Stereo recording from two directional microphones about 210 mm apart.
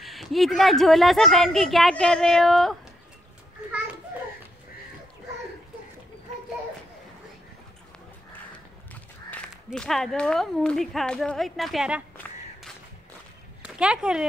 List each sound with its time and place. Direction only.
0.0 s a woman's voice: centre (ahead or behind)
9.7 s a woman's voice: centre (ahead or behind)
13.6 s speech: 5° right (ahead or behind)